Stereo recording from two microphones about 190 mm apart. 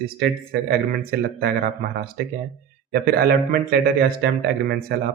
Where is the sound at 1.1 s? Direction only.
50° right (ahead or behind).